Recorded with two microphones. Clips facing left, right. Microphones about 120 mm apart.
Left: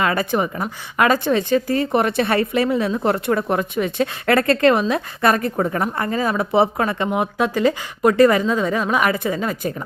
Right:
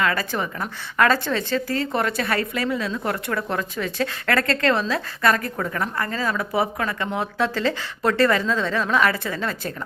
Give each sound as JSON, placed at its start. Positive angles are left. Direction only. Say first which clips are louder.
{"t": 0.0, "sound": "a woman's voice", "louder": "left 4 dB", "side_deg": 20}
{"t": 7.1, "sound": "speech", "louder": "left 4 dB", "side_deg": 15}